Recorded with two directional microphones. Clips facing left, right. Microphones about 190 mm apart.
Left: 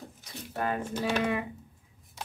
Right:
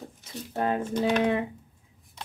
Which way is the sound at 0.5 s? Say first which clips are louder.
Right 4 dB; 25° right (ahead or behind).